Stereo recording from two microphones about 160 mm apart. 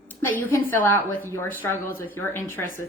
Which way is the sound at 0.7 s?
15° left (ahead or behind).